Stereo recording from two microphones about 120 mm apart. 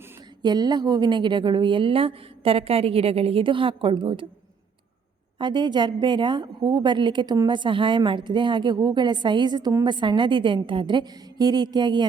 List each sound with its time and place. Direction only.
0.4 s a woman's voice: 35° right (ahead or behind)
5.4 s a woman's voice: 40° right (ahead or behind)